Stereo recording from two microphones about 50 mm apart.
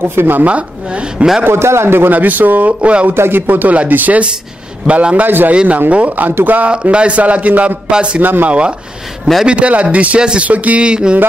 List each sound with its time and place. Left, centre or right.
0.0 s speech: right
0.5 s a man's voice: right
1.4 s a man's voice: right
2.1 s speech: right
3.2 s a man's voice: right
6.7 s a man's voice: right
8.2 s speech: right
8.5 s a man's voice: right